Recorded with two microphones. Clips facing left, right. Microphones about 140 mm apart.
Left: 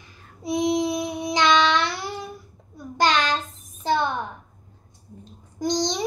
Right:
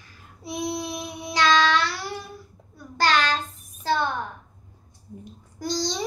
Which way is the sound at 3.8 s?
20° left (ahead or behind).